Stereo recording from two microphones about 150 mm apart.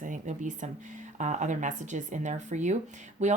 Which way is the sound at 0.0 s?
55° right (ahead or behind).